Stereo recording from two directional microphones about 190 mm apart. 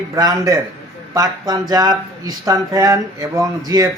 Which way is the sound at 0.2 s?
20° right (ahead or behind).